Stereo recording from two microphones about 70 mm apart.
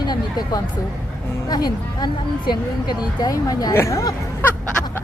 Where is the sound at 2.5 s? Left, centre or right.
Left.